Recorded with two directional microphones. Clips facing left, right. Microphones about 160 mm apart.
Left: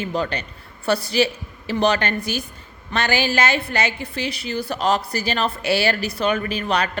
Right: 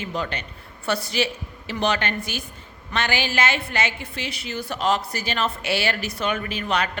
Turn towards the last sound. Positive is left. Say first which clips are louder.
# left 3 dB
turn(degrees=35)  # may be behind; listen again after turning